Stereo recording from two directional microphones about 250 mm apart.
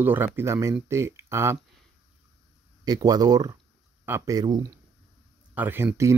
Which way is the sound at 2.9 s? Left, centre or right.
Centre.